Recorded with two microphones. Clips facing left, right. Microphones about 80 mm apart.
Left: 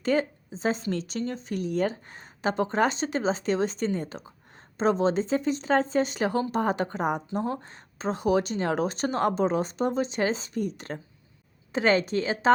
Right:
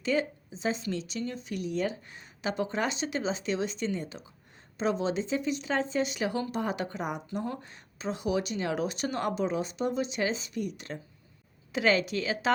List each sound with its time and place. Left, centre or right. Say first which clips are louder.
0.0 s a woman's voice: left 4 dB; left